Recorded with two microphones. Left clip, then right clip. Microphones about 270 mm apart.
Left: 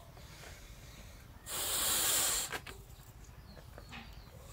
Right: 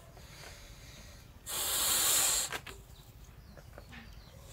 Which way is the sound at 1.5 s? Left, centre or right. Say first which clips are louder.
Right 2 dB; centre.